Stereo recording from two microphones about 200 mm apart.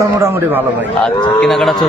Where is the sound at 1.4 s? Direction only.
Centre (ahead or behind).